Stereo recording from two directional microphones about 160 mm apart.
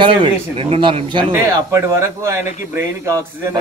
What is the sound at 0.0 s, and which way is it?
A man's voice, 35° right (ahead or behind).